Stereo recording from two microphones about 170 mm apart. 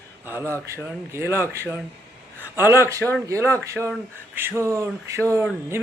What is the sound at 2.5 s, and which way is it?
A man's voice, 15° right (ahead or behind).